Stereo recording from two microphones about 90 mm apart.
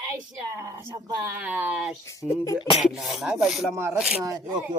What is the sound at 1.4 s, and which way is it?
Speech, 15° right (ahead or behind).